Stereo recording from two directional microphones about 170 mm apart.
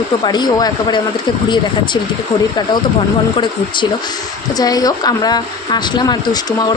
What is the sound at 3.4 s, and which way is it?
Speech, 30° left (ahead or behind).